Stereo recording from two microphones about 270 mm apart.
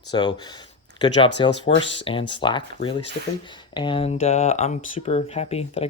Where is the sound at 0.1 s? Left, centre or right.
Centre.